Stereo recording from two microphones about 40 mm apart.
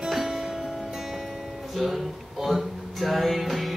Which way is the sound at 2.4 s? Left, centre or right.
Centre.